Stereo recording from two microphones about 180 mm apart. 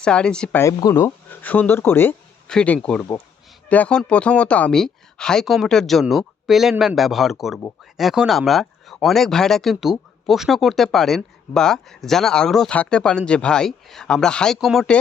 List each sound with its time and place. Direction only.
0.0 s speech: 5° left (ahead or behind)
0.6 s speech: 20° left (ahead or behind); by 14.9 s centre (ahead or behind)